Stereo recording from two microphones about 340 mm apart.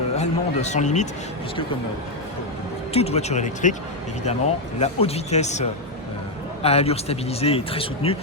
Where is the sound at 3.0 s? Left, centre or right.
Centre.